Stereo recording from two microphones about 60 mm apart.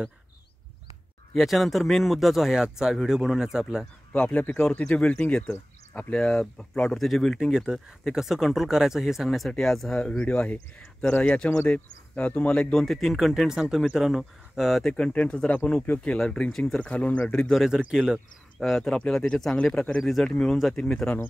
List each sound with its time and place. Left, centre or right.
1.3 s speech: centre
4.1 s speech: left; by 7.3 s centre
7.3 s speech: centre
9.9 s speech: centre
15.0 s speech: centre
16.5 s speech: centre
16.8 s speech: left
17.6 s speech: centre
18.6 s speech: centre
19.0 s speech: centre
20.0 s speech: centre